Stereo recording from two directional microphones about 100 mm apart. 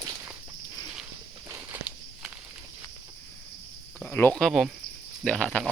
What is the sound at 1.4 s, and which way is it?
Walk, 25° right (ahead or behind).